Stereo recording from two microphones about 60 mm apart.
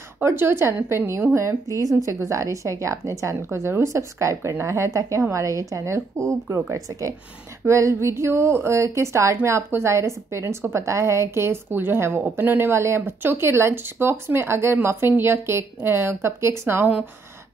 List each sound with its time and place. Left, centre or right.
0.2 s a woman's voice: right
2.0 s a woman's voice: right
3.4 s a woman's voice: right
5.3 s a woman's voice: right
5.9 s a woman's voice: right
11.7 s speech: right